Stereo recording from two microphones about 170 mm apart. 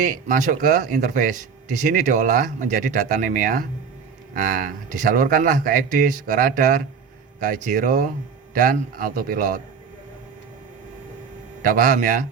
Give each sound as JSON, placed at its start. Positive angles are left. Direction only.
{"t": 0.0, "sound": "a man's voice", "side_deg": -50}
{"t": 11.6, "sound": "speech", "side_deg": -55}